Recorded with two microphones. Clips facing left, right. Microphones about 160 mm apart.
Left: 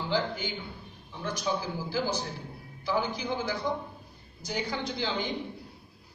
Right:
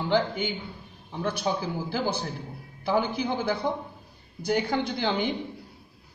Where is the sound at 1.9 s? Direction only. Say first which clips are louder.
Even; 60° right (ahead or behind).